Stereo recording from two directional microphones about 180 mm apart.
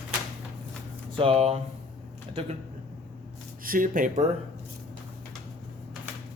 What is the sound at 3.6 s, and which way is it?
Speech, 50° right (ahead or behind).